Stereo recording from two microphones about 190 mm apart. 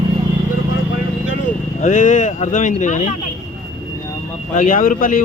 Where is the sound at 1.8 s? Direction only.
40° left (ahead or behind).